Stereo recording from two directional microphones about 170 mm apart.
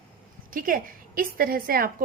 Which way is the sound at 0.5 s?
55° right (ahead or behind).